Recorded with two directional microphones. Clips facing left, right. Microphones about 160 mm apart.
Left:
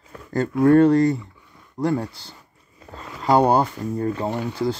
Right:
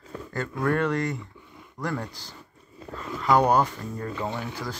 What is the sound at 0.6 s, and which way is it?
Speech, 35° left (ahead or behind).